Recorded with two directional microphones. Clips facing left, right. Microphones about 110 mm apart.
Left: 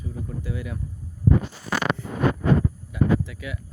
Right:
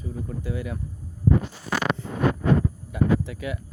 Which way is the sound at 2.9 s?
40° right (ahead or behind).